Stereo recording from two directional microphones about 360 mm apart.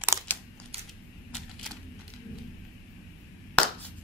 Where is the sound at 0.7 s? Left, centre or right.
Centre.